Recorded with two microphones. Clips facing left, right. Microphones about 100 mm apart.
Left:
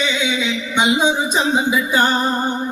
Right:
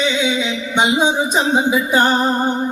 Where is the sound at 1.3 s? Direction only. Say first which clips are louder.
Right 2 dB; 35° right (ahead or behind).